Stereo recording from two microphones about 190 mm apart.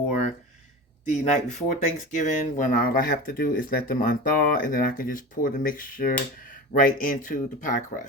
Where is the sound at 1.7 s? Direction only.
40° left (ahead or behind).